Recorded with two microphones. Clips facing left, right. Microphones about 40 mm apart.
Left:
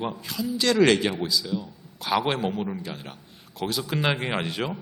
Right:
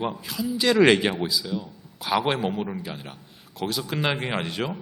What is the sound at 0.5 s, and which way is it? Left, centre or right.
A man's voice, centre.